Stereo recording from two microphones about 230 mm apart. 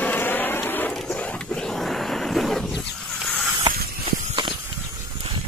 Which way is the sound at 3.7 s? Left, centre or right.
Centre.